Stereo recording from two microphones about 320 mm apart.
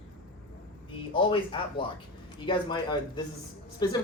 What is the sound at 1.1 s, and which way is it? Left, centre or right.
Speech, centre.